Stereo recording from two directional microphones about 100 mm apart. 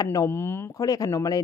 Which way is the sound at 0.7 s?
35° left (ahead or behind).